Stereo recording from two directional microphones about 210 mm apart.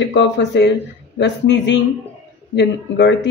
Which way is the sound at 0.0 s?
55° left (ahead or behind).